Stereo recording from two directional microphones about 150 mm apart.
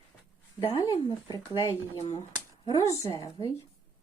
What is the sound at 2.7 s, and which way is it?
Speech, 20° left (ahead or behind).